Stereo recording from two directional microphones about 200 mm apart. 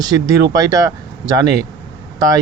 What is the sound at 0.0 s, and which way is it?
Speech, 20° right (ahead or behind).